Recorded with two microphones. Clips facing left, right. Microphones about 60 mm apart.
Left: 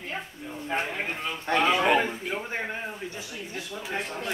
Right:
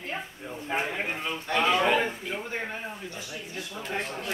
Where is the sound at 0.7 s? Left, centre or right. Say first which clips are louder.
Even; centre.